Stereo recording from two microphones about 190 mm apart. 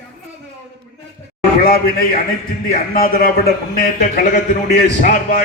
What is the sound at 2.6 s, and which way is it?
A man's voice, 50° left (ahead or behind).